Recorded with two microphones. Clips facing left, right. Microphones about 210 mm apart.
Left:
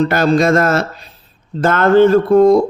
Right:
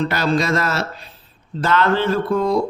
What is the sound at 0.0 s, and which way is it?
Speech, 45° left (ahead or behind).